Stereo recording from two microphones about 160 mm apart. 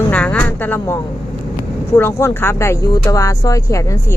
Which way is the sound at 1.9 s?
15° left (ahead or behind).